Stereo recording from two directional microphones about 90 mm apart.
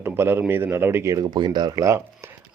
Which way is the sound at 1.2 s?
55° right (ahead or behind).